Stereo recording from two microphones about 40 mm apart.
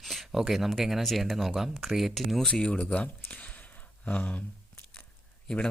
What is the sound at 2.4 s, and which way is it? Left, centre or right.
Speech, centre.